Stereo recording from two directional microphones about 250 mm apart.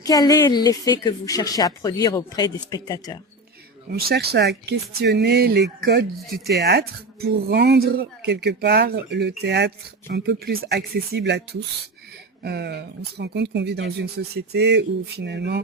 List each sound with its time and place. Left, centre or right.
0.0 s a woman's voice: centre
3.9 s speech: right
6.1 s speech: centre
6.6 s speech: right